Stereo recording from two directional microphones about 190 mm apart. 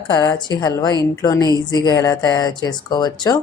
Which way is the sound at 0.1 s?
20° left (ahead or behind).